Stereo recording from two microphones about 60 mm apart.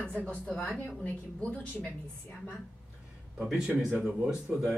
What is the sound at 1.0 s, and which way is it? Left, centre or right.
Speech, left.